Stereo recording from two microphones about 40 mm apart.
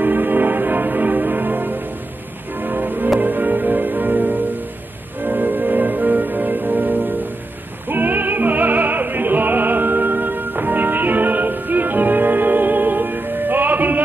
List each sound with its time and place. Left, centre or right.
0.0 s music: right